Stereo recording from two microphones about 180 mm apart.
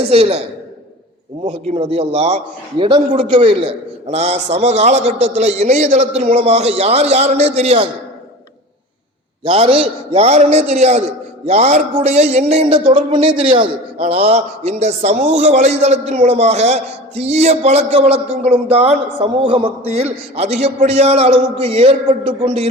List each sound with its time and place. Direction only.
0.0 s a man's voice: 35° right (ahead or behind)
1.5 s a man's voice: 35° right (ahead or behind)
9.4 s a man's voice: 30° right (ahead or behind)